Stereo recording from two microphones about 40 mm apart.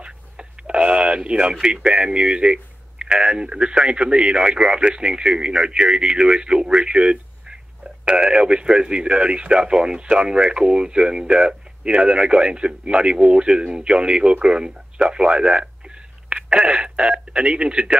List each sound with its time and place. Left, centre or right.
0.0 s speech: right
16.4 s a sound: right
17.3 s speech: right